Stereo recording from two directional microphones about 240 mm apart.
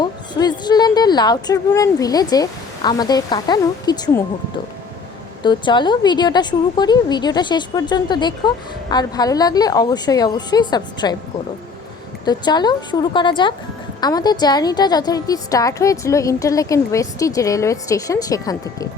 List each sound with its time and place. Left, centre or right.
0.0 s a woman's voice: centre
5.4 s a woman's voice: centre
12.2 s a woman's voice: centre